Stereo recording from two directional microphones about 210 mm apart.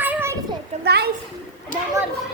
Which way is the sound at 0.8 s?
50° right (ahead or behind).